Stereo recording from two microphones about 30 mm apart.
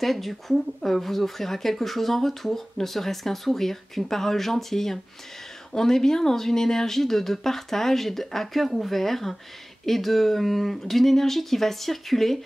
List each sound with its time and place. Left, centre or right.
0.0 s speech: centre